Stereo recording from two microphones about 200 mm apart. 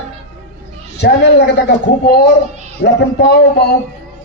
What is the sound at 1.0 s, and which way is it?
A man's voice, 55° left (ahead or behind).